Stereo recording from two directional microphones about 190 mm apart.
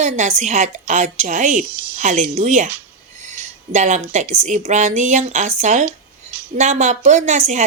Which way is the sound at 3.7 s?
40° right (ahead or behind).